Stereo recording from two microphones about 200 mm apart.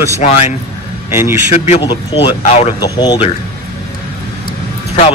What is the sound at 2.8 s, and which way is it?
Speech, 20° left (ahead or behind).